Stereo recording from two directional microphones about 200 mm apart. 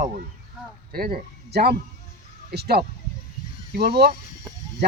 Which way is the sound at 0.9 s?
50° right (ahead or behind).